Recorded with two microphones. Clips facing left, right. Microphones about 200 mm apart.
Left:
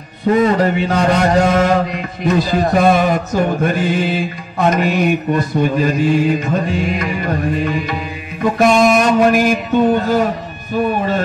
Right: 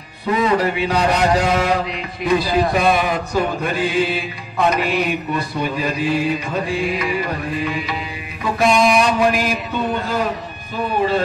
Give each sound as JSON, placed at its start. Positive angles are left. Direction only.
{"t": 0.3, "sound": "music", "side_deg": 45}